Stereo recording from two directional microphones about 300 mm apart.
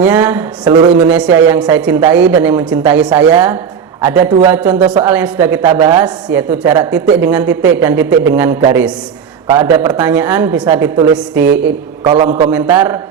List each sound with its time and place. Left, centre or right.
0.0 s a woman's voice: centre
0.9 s a woman's voice: centre
12.0 s a man's voice: right
12.5 s a woman's voice: centre